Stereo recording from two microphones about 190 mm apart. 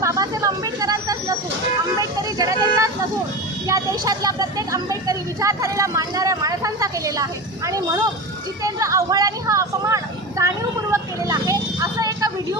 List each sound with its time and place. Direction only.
0.0 s a sound: 15° right (ahead or behind)
2.0 s vehicle: 20° right (ahead or behind)
3.6 s a woman's voice: 20° right (ahead or behind)